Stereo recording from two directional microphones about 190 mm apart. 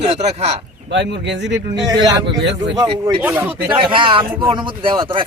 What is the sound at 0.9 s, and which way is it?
Speech, 65° right (ahead or behind).